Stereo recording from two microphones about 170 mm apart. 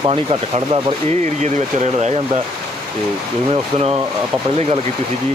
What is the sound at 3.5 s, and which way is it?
Speech, 35° right (ahead or behind).